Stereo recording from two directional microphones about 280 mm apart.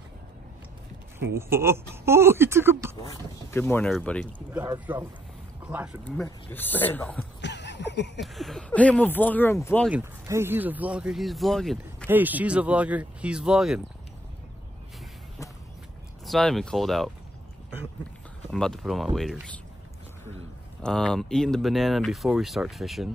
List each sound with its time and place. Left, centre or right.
1.3 s speech: centre
3.0 s speech: centre
4.5 s speech: centre
6.0 s speech: centre
7.4 s a sound: left
8.2 s speech: centre
9.8 s speech: centre
16.3 s speech: centre
18.5 s speech: centre
20.8 s speech: centre